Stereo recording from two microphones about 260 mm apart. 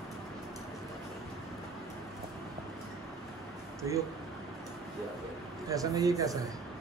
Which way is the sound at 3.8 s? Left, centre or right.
Centre.